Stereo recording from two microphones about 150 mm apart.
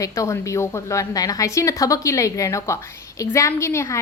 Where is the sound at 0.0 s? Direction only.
20° left (ahead or behind).